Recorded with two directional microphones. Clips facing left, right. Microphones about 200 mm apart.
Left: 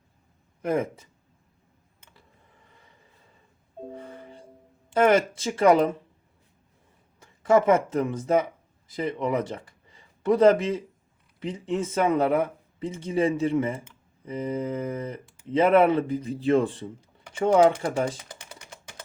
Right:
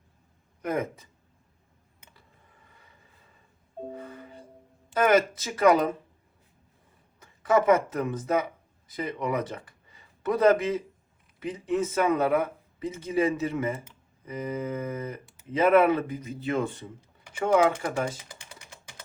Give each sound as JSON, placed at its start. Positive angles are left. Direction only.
{"t": 0.6, "sound": "speech", "side_deg": 25}
{"t": 3.9, "sound": "music", "side_deg": 30}
{"t": 4.9, "sound": "speech", "side_deg": 30}
{"t": 7.2, "sound": "speech", "side_deg": 30}